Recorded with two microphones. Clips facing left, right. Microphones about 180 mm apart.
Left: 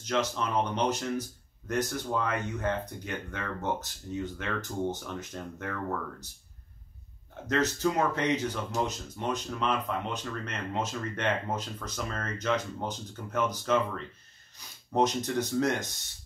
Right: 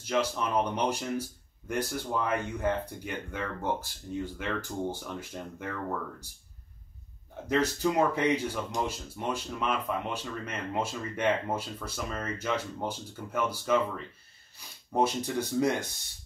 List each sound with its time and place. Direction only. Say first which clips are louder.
0.0 s speech: right 1 dB; 10° right (ahead or behind)
7.4 s speech: even; 10° right (ahead or behind)